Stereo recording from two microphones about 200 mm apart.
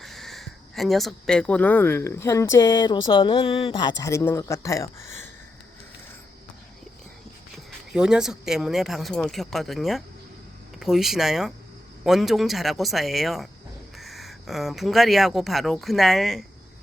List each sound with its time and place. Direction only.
0.0 s speech: centre (ahead or behind)
7.5 s speech: 5° right (ahead or behind)